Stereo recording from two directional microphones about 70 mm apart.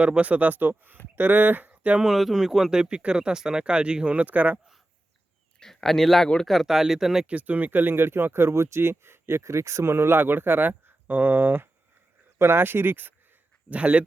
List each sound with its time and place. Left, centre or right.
0.0 s speech: centre
2.0 s speech: centre; by 4.6 s right
5.5 s speech: centre
7.3 s speech: right